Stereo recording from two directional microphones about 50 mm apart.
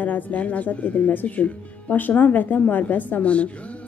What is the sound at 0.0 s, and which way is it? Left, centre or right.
Speech, left.